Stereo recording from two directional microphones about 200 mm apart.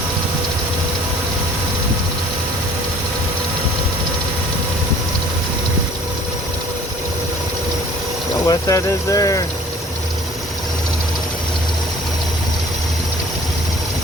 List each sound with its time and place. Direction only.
8.4 s speech: 15° left (ahead or behind)